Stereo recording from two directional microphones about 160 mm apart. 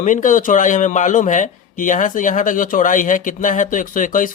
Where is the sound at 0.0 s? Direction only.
55° left (ahead or behind).